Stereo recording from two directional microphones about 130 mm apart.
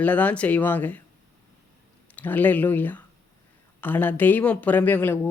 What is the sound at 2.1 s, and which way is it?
Speech, 15° left (ahead or behind).